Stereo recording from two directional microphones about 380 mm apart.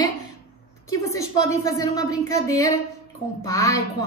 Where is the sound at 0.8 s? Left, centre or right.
Centre.